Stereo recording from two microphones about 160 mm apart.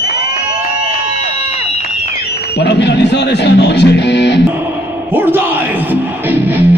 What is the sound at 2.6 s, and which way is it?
Music, 90° left.